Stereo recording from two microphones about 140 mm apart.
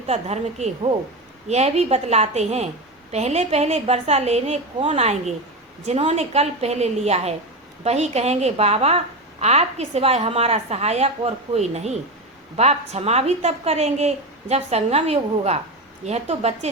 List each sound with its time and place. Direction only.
0.1 s a woman's voice: 50° right (ahead or behind)